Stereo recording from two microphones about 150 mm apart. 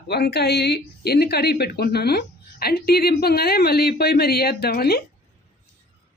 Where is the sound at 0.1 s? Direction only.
90° left.